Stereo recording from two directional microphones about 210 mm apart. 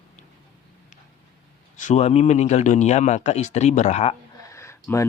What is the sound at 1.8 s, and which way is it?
A man's voice, 35° left (ahead or behind).